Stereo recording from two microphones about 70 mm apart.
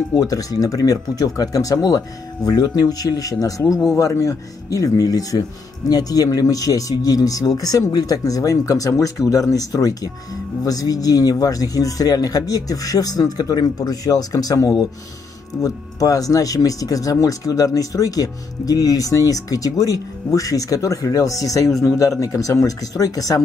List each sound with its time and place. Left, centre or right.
0.2 s speech: left
15.6 s a man's voice: left